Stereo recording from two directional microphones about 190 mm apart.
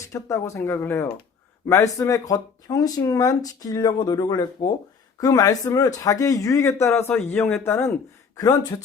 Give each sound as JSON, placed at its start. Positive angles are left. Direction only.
{"t": 0.0, "sound": "speech", "side_deg": 15}